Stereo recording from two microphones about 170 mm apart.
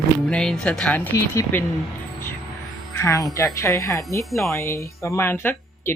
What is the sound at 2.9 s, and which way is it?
Speech, 20° left (ahead or behind).